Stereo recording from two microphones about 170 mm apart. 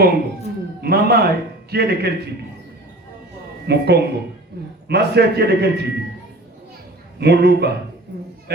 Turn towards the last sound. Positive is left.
turn(degrees=-75)  # may be behind; listen again after turning